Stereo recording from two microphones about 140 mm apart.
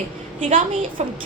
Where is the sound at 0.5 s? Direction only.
40° right (ahead or behind).